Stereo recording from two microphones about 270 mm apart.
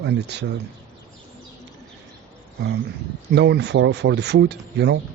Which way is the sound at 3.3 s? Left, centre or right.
Right.